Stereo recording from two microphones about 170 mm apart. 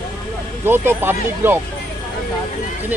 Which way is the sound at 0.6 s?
15° right (ahead or behind).